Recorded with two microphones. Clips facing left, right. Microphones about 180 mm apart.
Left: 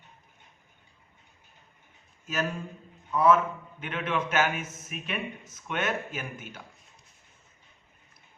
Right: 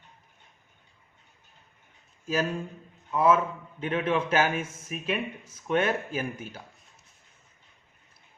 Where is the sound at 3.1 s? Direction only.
25° right (ahead or behind).